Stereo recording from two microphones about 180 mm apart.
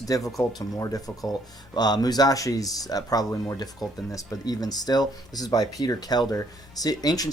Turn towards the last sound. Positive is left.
turn(degrees=20)  # may be behind; listen again after turning